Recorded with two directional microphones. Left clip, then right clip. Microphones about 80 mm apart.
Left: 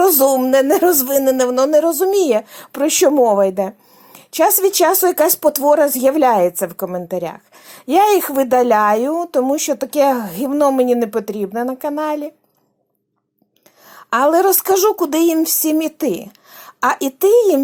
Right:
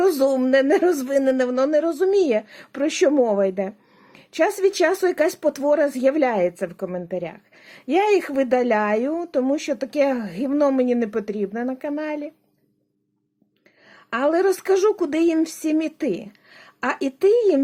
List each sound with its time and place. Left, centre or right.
0.0 s a woman's voice: left
7.5 s a woman's voice: left
14.1 s a woman's voice: left